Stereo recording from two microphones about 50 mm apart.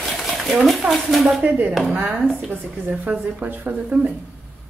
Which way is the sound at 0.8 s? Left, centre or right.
Right.